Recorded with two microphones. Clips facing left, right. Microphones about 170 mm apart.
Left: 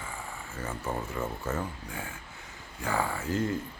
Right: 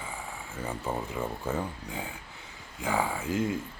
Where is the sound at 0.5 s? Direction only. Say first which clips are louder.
Right 1 dB; 15° right (ahead or behind).